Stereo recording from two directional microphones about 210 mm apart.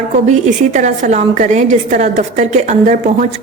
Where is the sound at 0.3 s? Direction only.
35° right (ahead or behind).